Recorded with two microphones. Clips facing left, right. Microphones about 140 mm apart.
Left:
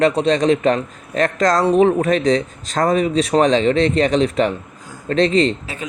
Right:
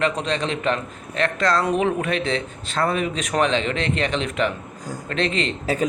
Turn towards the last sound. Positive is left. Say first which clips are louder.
# right 7 dB
turn(degrees=-40)  # may be behind; listen again after turning